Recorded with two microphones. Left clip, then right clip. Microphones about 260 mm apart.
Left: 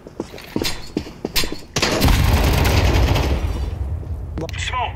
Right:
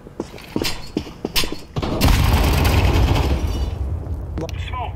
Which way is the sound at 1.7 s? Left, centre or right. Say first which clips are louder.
Left 6 dB; left.